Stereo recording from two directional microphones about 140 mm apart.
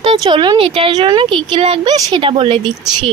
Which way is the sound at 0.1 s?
35° right (ahead or behind).